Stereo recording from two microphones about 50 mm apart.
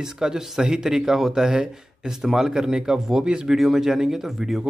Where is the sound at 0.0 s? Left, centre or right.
Centre.